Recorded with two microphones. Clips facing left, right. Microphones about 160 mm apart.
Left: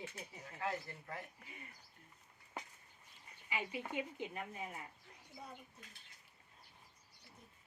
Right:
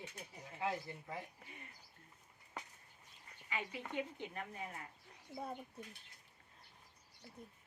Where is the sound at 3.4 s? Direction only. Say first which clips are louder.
Left 2 dB; 10° left (ahead or behind).